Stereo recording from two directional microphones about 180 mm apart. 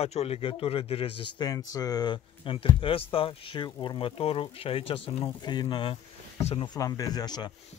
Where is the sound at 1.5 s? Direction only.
20° left (ahead or behind).